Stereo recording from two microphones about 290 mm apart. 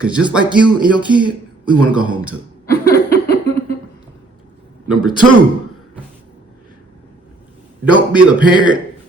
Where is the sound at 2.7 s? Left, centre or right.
Left.